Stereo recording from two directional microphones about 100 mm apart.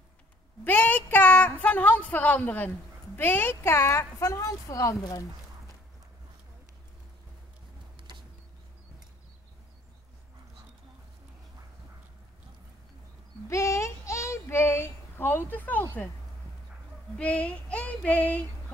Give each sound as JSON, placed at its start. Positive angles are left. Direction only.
{"t": 0.7, "sound": "a sound", "side_deg": 20}
{"t": 3.2, "sound": "speech", "side_deg": 20}
{"t": 13.5, "sound": "child singing", "side_deg": 30}
{"t": 17.2, "sound": "child singing", "side_deg": 15}